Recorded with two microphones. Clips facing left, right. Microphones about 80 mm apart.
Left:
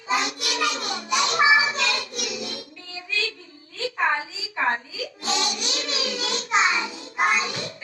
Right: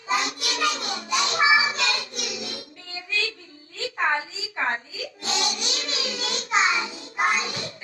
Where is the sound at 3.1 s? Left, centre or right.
Right.